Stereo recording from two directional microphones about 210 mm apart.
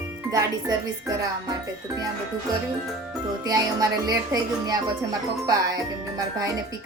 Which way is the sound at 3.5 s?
15° right (ahead or behind).